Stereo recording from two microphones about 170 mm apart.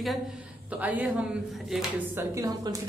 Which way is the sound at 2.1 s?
20° right (ahead or behind).